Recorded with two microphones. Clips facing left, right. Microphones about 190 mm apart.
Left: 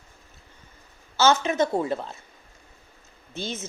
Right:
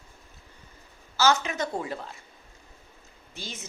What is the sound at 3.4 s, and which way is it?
Speech, 25° left (ahead or behind).